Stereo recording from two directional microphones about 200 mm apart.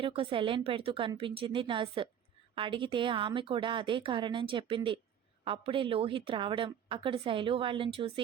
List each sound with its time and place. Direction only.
0.0 s a woman's voice: 25° right (ahead or behind)